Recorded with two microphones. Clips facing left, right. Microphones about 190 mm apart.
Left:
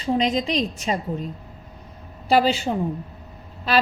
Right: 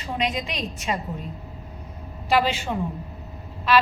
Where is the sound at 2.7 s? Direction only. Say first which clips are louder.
Left 3 dB; 30° left (ahead or behind).